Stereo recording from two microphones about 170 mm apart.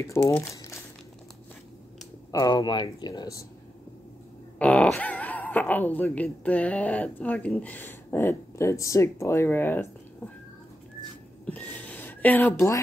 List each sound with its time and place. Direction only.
0.0 s speech: 15° left (ahead or behind)
2.3 s speech: 25° left (ahead or behind)
4.6 s speech: 10° left (ahead or behind)
11.4 s a sound: 10° left (ahead or behind)